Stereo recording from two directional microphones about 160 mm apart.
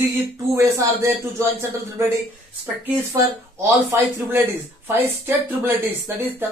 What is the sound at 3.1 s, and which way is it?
Speech, 20° right (ahead or behind).